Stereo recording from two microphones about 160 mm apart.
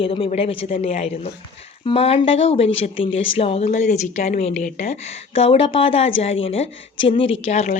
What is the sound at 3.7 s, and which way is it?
A woman's voice, 50° left (ahead or behind).